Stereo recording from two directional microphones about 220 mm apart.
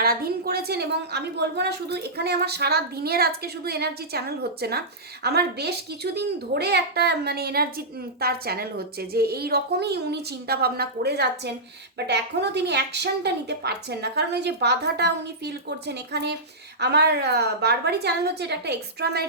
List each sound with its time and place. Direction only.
0.0 s a child's voice: 45° right (ahead or behind)